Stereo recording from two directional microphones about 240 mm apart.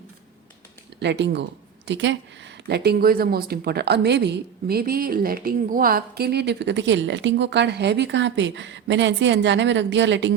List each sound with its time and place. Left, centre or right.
0.9 s speech: right